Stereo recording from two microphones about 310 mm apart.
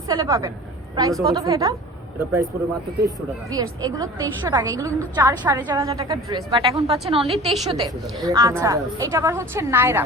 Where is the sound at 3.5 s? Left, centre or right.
Centre.